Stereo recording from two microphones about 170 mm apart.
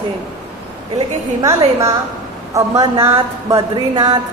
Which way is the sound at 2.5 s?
20° right (ahead or behind).